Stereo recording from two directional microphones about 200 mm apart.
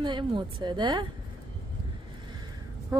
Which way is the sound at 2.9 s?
15° right (ahead or behind).